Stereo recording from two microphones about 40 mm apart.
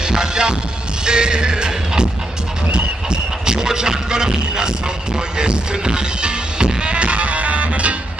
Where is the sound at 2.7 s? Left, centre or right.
Centre.